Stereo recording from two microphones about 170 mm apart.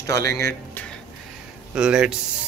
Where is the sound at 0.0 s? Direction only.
20° left (ahead or behind).